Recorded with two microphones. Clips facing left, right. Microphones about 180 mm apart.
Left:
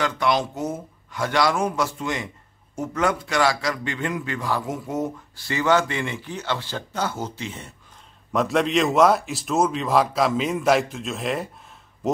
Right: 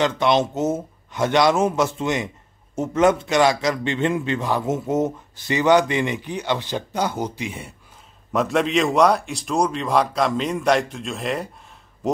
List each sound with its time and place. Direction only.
0.0 s a man's voice: 20° right (ahead or behind)
8.3 s a man's voice: centre (ahead or behind)